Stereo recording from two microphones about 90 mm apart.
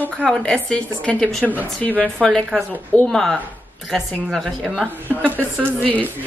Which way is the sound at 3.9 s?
Centre (ahead or behind).